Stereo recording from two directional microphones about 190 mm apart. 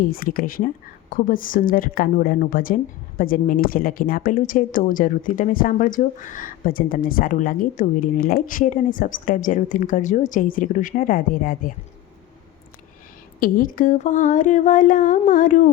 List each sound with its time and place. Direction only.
0.0 s a woman's voice: 50° left (ahead or behind)
13.4 s a woman's voice: 45° left (ahead or behind)